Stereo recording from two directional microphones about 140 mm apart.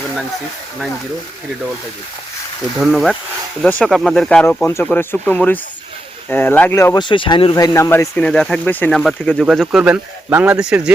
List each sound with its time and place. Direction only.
2.7 s speech: 5° right (ahead or behind)
4.4 s speech: 15° left (ahead or behind)
7.0 s speech: 35° left (ahead or behind)
7.6 s speech: 25° left (ahead or behind)
8.9 s speech: centre (ahead or behind)